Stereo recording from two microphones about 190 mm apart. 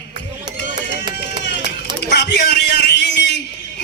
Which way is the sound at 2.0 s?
60° left (ahead or behind).